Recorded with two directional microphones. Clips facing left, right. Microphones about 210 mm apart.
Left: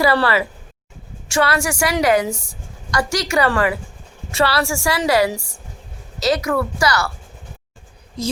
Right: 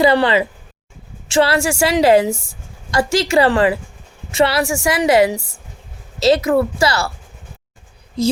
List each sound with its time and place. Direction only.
0.0 s a woman's voice: 20° right (ahead or behind)